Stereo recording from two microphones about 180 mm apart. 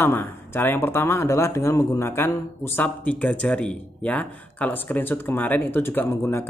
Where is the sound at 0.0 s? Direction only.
10° left (ahead or behind).